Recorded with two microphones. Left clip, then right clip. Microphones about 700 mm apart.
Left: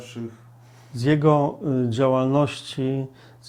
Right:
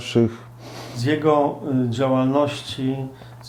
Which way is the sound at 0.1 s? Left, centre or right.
Right.